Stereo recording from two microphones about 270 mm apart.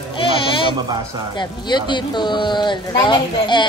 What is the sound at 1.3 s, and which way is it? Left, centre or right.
Speech, centre.